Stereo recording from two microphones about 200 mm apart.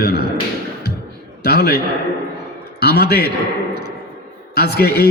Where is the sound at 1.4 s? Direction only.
55° left (ahead or behind).